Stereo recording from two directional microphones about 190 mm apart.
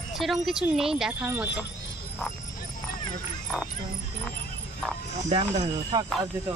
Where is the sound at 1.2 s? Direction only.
15° right (ahead or behind).